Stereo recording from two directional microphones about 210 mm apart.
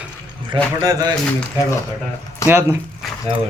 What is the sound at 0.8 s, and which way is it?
Speech, 20° right (ahead or behind).